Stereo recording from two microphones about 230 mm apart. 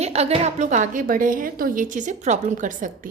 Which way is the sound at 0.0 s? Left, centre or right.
Right.